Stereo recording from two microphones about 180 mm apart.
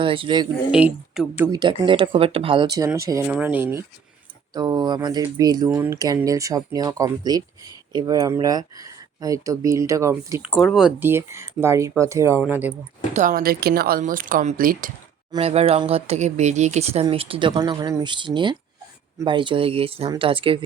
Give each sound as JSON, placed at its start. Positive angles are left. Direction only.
{"t": 0.0, "sound": "speech", "side_deg": -30}
{"t": 0.7, "sound": "speech", "side_deg": -5}
{"t": 1.5, "sound": "speech", "side_deg": -25}
{"t": 10.4, "sound": "speech", "side_deg": 0}
{"t": 13.1, "sound": "speech", "side_deg": -50}
{"t": 15.4, "sound": "speech", "side_deg": -35}